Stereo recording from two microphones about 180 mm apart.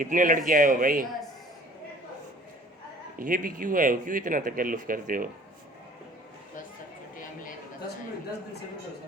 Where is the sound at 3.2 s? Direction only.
50° right (ahead or behind).